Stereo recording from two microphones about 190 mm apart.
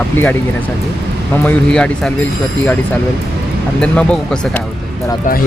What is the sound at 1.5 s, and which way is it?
Speech, 5° left (ahead or behind).